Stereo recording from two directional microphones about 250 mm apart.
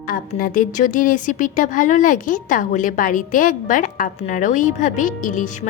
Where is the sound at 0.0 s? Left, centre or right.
Left.